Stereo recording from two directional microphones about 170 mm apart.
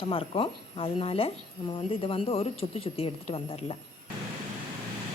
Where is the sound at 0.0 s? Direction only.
30° left (ahead or behind).